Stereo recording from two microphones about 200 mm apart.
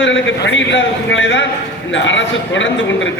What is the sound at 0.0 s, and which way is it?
A man's voice, 65° left (ahead or behind).